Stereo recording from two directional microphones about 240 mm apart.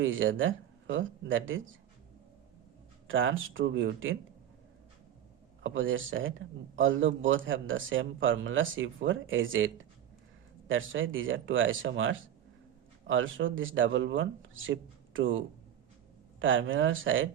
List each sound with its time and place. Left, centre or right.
0.0 s speech: right
3.1 s speech: right
5.6 s speech: right